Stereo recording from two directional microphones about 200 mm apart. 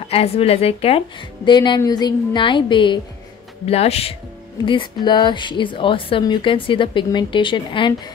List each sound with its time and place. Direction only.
0.1 s a woman's voice: 30° left (ahead or behind)